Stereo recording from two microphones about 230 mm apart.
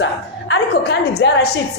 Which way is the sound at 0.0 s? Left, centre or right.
Left.